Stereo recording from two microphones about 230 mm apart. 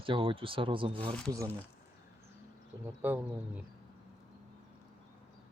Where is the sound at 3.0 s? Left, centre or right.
Centre.